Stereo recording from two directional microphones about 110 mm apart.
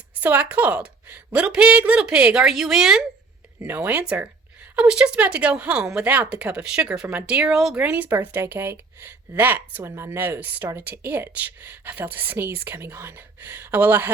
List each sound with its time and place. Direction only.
0.2 s a woman's voice: 15° right (ahead or behind)